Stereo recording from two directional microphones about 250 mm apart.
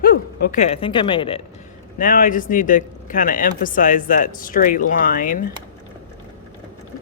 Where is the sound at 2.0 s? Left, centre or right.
Left.